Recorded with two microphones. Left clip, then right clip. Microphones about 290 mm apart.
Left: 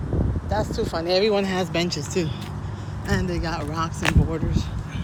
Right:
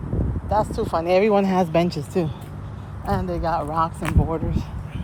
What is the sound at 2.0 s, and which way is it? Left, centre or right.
Speech, right.